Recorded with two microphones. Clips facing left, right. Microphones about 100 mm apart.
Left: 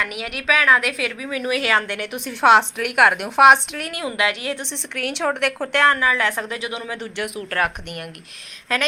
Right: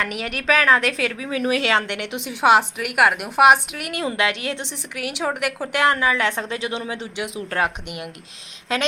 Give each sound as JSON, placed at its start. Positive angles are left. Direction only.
{"t": 0.4, "sound": "a woman's voice", "side_deg": -35}
{"t": 3.9, "sound": "a woman's voice", "side_deg": -25}
{"t": 4.7, "sound": "a woman's voice", "side_deg": -5}